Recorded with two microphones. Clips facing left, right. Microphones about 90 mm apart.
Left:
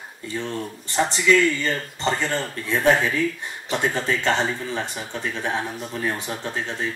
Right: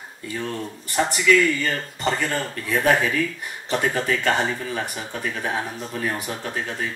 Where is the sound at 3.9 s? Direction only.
30° left (ahead or behind).